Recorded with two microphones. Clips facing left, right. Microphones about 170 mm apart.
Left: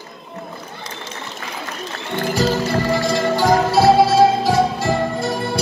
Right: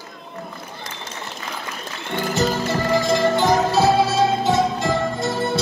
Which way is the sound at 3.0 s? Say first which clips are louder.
Even; 20° right (ahead or behind).